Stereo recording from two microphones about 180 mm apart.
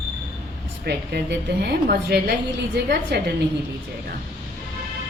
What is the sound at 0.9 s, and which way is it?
A woman's voice, 65° right (ahead or behind).